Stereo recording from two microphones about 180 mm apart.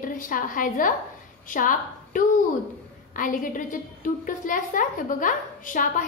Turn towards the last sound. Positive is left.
turn(degrees=45)  # may be behind; listen again after turning